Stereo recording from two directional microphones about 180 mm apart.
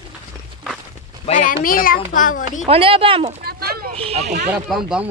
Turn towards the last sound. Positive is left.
turn(degrees=-5)  # may be behind; listen again after turning